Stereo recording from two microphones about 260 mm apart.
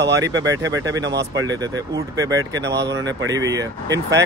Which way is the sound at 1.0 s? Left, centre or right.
Right.